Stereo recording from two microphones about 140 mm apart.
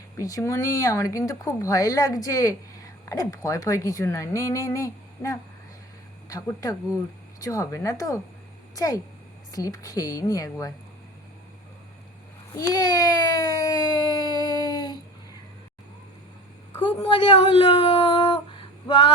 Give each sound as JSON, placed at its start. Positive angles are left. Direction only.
{"t": 0.2, "sound": "a woman's voice", "side_deg": 25}
{"t": 12.5, "sound": "a sound", "side_deg": 25}
{"t": 16.8, "sound": "speech", "side_deg": 35}